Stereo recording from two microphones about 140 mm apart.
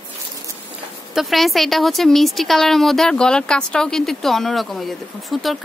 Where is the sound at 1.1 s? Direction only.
Centre (ahead or behind).